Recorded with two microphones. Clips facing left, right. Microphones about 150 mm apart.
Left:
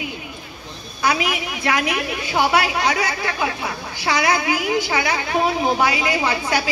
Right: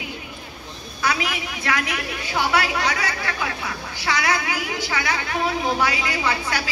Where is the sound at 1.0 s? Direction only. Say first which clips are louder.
Left 4 dB; 15° left (ahead or behind).